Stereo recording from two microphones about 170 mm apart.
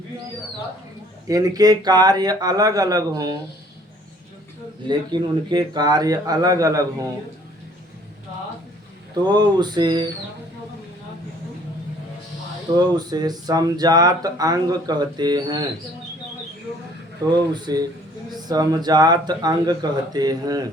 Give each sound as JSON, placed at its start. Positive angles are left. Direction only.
{"t": 1.3, "sound": "speech", "side_deg": -20}
{"t": 4.9, "sound": "speech", "side_deg": -25}
{"t": 9.1, "sound": "speech", "side_deg": -25}
{"t": 12.7, "sound": "speech", "side_deg": -25}
{"t": 17.3, "sound": "speech", "side_deg": -25}